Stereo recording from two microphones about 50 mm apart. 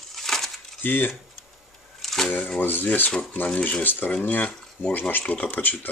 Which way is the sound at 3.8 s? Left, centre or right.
Left.